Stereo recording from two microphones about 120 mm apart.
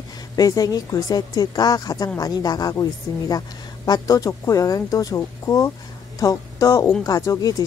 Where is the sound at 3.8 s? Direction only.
30° left (ahead or behind).